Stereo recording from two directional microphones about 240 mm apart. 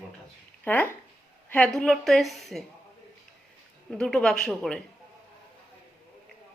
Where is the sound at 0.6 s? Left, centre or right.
Centre.